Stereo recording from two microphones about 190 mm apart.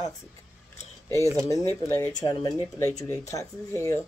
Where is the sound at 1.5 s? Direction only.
15° left (ahead or behind).